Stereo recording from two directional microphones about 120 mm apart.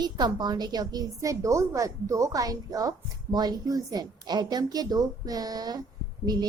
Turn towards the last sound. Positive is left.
turn(degrees=-35)  # may be behind; listen again after turning